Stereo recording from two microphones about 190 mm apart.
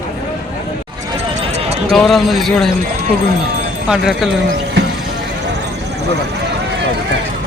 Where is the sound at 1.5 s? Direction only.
35° right (ahead or behind).